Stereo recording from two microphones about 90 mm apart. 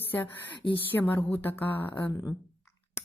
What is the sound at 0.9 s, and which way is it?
Speech, 20° left (ahead or behind).